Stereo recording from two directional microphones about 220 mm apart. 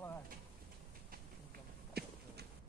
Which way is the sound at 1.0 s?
45° right (ahead or behind).